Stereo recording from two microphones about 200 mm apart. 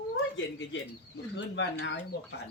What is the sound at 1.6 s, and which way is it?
Speech, 65° left (ahead or behind).